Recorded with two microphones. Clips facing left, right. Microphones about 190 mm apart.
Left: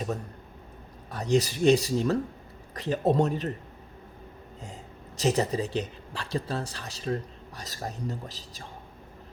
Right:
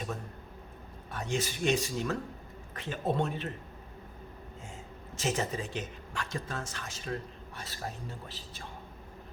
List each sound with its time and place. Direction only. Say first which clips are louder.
1.1 s speech: left 8 dB; 40° left (ahead or behind)
4.6 s speech: left 6 dB; 35° left (ahead or behind)